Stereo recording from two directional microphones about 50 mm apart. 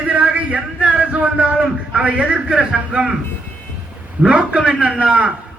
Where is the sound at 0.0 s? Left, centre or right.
Right.